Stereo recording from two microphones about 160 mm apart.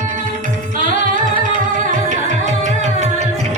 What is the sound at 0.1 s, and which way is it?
Music, 55° right (ahead or behind).